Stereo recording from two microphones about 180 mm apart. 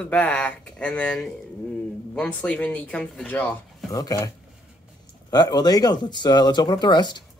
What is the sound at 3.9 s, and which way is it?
Speech, 20° left (ahead or behind).